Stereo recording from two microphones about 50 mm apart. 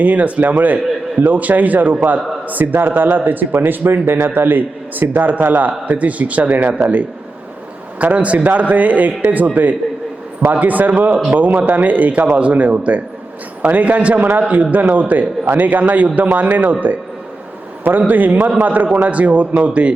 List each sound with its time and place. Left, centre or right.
0.0 s speech: right
7.9 s a man's voice: right
17.8 s a man's voice: right